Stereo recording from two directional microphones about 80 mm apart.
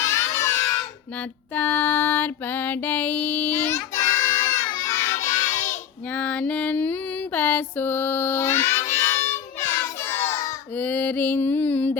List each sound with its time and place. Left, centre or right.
0.0 s a sound: left
1.5 s mantra: left
3.6 s child singing: left
6.1 s music: centre; by 10.4 s left
10.8 s mantra: left